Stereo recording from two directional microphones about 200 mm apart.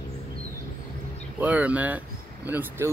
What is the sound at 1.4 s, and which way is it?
Speech, 5° right (ahead or behind).